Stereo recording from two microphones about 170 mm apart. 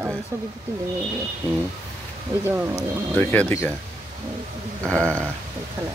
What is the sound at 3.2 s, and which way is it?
Speech, 10° left (ahead or behind).